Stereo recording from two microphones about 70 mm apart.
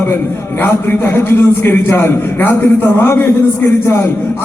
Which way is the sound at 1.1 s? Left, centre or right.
Left.